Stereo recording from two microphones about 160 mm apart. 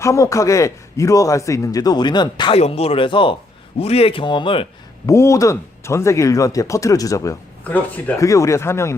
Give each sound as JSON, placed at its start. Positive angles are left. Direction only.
{"t": 0.0, "sound": "speech", "side_deg": 20}
{"t": 2.6, "sound": "speech", "side_deg": 40}
{"t": 5.0, "sound": "speech", "side_deg": 20}